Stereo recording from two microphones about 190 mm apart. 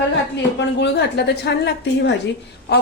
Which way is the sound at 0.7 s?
65° left (ahead or behind).